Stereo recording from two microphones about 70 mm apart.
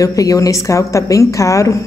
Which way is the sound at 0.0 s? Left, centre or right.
Left.